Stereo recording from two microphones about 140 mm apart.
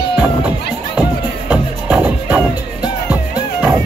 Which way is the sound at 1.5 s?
10° right (ahead or behind).